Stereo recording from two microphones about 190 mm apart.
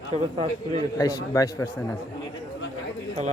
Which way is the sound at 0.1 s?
35° right (ahead or behind).